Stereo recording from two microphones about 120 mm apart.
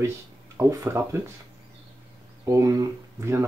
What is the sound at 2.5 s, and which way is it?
Speech, 30° right (ahead or behind).